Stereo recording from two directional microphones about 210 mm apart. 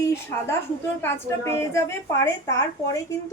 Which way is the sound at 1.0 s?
10° left (ahead or behind).